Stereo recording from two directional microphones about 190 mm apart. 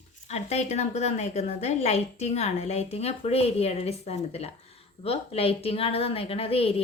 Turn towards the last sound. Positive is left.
turn(degrees=30)  # may be behind; listen again after turning